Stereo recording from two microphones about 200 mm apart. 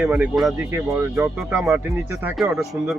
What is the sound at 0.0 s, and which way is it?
Speech, 5° right (ahead or behind).